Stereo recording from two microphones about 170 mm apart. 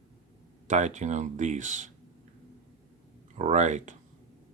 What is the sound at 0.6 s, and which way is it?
Speech, 45° right (ahead or behind).